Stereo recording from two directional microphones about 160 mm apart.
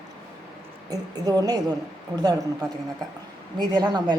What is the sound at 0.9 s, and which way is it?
A woman's voice, 25° right (ahead or behind).